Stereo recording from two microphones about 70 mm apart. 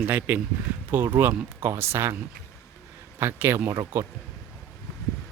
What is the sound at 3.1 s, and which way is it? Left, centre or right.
Speech, right.